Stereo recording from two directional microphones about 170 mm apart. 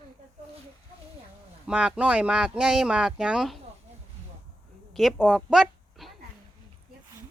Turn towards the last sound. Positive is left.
turn(degrees=0)  # may be behind; listen again after turning